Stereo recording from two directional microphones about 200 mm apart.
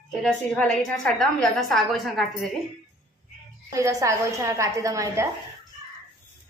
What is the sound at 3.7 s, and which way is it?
A woman's voice, 15° right (ahead or behind).